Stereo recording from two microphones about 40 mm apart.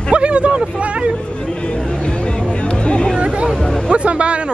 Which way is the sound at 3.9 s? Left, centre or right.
Right.